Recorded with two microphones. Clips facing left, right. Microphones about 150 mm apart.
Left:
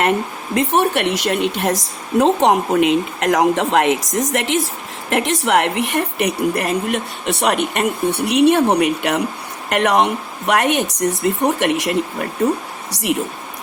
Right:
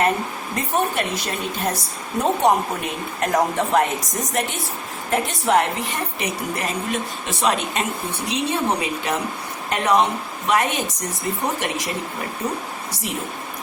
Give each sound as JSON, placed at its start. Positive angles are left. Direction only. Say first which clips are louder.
{"t": 0.5, "sound": "a woman's voice", "louder": "left 6 dB", "side_deg": 80}